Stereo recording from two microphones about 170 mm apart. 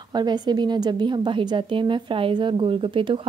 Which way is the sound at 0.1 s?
25° right (ahead or behind).